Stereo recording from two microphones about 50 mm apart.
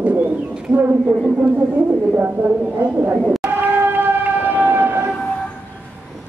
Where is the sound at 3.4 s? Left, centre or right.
Right.